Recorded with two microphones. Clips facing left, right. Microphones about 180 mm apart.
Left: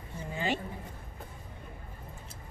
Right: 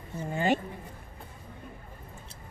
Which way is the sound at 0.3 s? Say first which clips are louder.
Right 6 dB; 50° right (ahead or behind).